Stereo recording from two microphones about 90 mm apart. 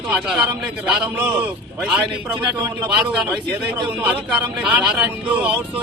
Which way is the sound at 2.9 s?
5° right (ahead or behind).